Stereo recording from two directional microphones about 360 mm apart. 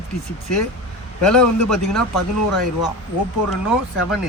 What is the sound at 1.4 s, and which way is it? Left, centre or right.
Speech, left.